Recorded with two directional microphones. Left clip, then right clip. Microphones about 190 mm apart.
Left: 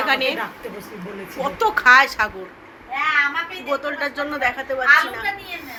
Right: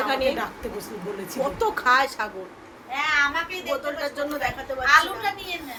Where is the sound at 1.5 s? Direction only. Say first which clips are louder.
Left 8 dB; 10° left (ahead or behind).